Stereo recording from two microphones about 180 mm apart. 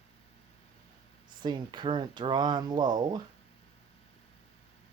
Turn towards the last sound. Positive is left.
turn(degrees=-25)  # may be behind; listen again after turning